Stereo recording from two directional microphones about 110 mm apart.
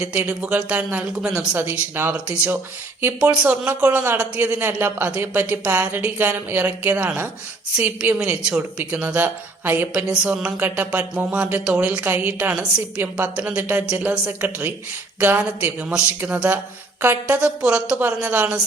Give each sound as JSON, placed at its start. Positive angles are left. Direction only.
{"t": 0.0, "sound": "a woman's voice", "side_deg": -10}